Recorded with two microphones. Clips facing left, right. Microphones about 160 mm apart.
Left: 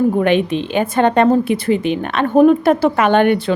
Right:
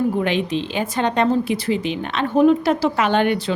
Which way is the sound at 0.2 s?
55° left (ahead or behind).